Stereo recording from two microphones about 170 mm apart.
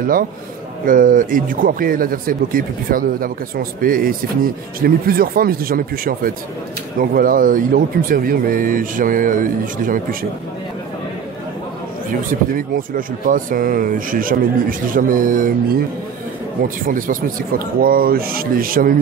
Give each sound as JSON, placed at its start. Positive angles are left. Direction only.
{"t": 0.8, "sound": "a man's voice", "side_deg": -55}
{"t": 12.1, "sound": "a man's voice", "side_deg": -55}